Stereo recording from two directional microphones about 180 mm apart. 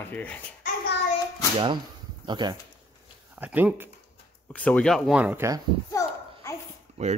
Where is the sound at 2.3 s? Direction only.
25° right (ahead or behind).